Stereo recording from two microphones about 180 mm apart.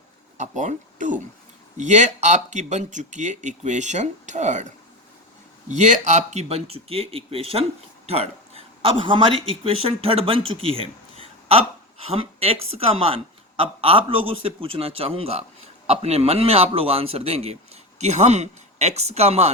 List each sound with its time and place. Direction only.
0.3 s a man's voice: 40° right (ahead or behind)
5.6 s a man's voice: 40° right (ahead or behind)
10.5 s a sound: 30° right (ahead or behind)
12.7 s a man's voice: 35° right (ahead or behind)